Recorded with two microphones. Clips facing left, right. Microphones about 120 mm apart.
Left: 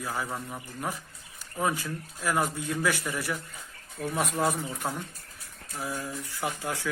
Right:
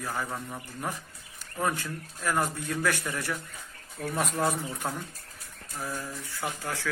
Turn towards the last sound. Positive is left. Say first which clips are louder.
# left 2 dB
turn(degrees=20)  # may be behind; listen again after turning